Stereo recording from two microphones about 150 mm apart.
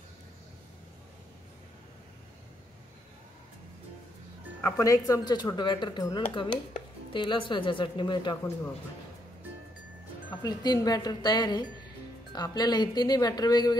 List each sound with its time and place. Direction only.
4.6 s speech: 20° left (ahead or behind)
10.4 s speech: 25° left (ahead or behind)